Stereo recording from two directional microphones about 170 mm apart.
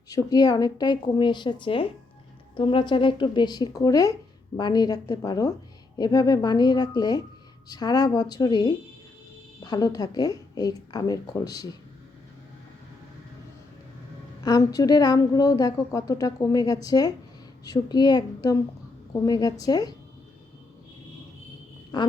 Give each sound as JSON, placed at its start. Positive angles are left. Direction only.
{"t": 0.1, "sound": "a woman's voice", "side_deg": 25}
{"t": 14.4, "sound": "a woman's voice", "side_deg": 20}
{"t": 21.9, "sound": "a woman's voice", "side_deg": 25}